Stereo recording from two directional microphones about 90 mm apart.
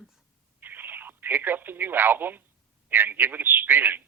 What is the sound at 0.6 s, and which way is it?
Speech, 20° right (ahead or behind).